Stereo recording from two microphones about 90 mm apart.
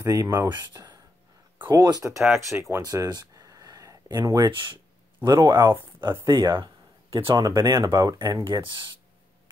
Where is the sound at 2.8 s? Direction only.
45° right (ahead or behind).